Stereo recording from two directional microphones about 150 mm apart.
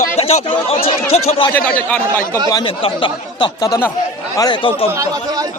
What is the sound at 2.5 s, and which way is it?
Speech, 35° left (ahead or behind).